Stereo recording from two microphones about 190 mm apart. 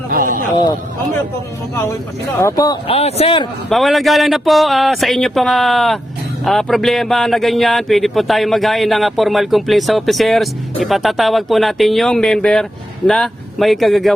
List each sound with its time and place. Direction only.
0.1 s a sound: 50° right (ahead or behind)
1.7 s speech: 15° left (ahead or behind); by 3.4 s 30° left (ahead or behind)
3.7 s speech: centre (ahead or behind)